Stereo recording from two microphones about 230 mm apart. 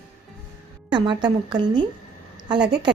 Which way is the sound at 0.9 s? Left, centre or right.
Centre.